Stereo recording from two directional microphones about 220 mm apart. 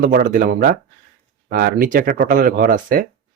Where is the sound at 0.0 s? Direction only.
35° right (ahead or behind).